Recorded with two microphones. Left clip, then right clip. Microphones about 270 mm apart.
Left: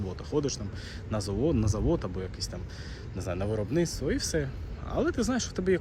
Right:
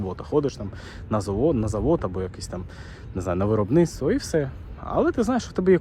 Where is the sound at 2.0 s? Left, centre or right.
Right.